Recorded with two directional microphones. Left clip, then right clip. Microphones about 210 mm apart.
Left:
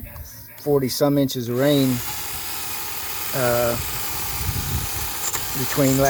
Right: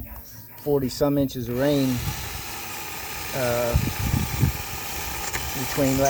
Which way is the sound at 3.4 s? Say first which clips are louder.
Left 4 dB; 45° left (ahead or behind).